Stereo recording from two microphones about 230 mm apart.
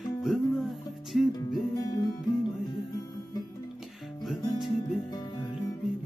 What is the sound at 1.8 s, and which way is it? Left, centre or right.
Music, centre.